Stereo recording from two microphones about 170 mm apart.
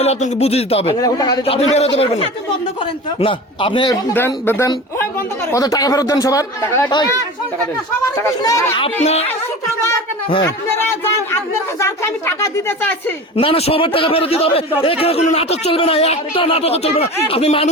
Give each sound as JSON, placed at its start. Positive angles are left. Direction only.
{"t": 0.0, "sound": "speech", "side_deg": 40}
{"t": 0.9, "sound": "speech", "side_deg": 20}
{"t": 1.5, "sound": "speech", "side_deg": 40}
{"t": 4.1, "sound": "speech", "side_deg": 10}
{"t": 8.4, "sound": "speech", "side_deg": 20}
{"t": 10.4, "sound": "speech", "side_deg": 15}
{"t": 13.3, "sound": "speech", "side_deg": 35}